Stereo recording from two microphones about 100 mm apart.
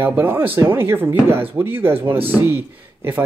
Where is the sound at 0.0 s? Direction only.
20° right (ahead or behind).